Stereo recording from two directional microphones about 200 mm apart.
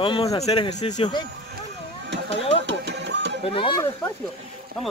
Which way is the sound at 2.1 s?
60° right (ahead or behind).